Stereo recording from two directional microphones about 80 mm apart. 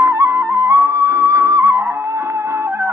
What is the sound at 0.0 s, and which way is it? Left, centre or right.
Music, right.